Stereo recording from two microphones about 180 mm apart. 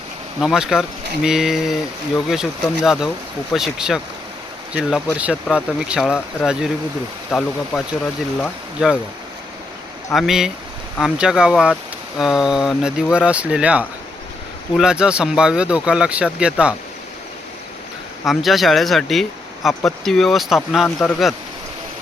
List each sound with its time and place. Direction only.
0.4 s speech: 5° right (ahead or behind)
10.1 s speech: centre (ahead or behind)
18.3 s speech: centre (ahead or behind)
20.8 s speech: 10° left (ahead or behind)